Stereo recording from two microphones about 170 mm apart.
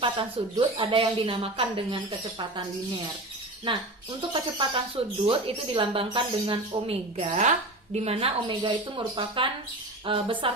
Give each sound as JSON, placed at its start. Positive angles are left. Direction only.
{"t": 0.0, "sound": "speech", "side_deg": -30}
{"t": 3.7, "sound": "speech", "side_deg": -30}